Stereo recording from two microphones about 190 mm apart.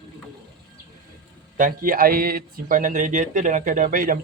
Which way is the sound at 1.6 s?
45° right (ahead or behind).